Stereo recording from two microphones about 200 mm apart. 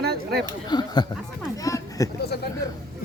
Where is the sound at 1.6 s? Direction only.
15° left (ahead or behind).